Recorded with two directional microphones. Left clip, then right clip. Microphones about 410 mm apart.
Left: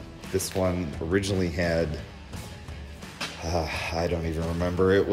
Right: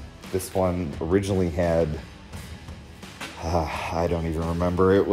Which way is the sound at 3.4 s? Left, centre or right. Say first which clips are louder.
Right 4 dB; centre.